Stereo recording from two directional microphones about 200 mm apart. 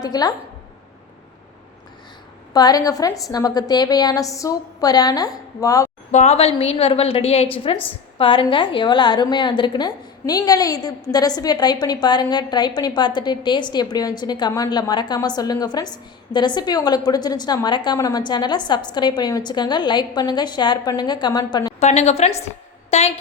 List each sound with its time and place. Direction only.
0.0 s a woman's voice: 20° left (ahead or behind)
2.5 s a woman's voice: 20° left (ahead or behind)
6.1 s a woman's voice: 35° left (ahead or behind)
21.8 s a woman's voice: 35° left (ahead or behind)